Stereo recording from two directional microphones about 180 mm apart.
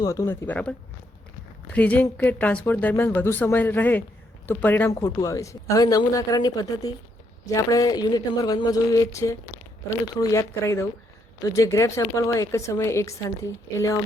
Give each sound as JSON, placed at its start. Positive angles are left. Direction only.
{"t": 0.0, "sound": "speech", "side_deg": 20}